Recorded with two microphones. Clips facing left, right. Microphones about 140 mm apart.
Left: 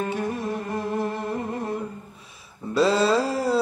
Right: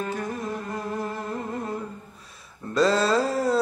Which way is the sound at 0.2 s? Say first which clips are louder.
Left 3 dB; 25° left (ahead or behind).